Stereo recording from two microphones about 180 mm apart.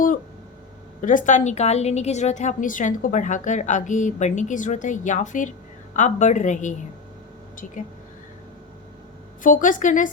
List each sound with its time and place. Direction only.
1.0 s a woman's voice: 45° left (ahead or behind)
9.4 s a woman's voice: 45° left (ahead or behind)